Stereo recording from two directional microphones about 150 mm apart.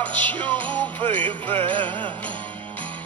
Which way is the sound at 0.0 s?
10° left (ahead or behind).